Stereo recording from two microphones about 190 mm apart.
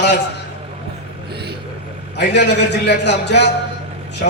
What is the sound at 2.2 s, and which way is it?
A man's voice, 65° left (ahead or behind).